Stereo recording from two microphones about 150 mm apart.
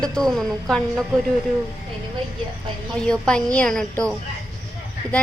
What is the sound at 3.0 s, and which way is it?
A woman's voice, 5° left (ahead or behind).